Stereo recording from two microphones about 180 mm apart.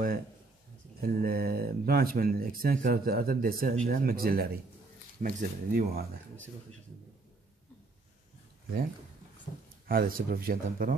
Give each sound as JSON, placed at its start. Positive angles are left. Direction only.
{"t": 1.0, "sound": "speech", "side_deg": -55}
{"t": 9.8, "sound": "speech", "side_deg": -55}